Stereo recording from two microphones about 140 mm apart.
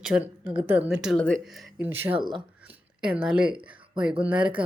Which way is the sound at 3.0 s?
5° right (ahead or behind).